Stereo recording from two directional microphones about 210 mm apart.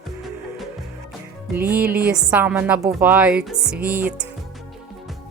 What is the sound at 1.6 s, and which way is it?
A woman's voice, 5° right (ahead or behind).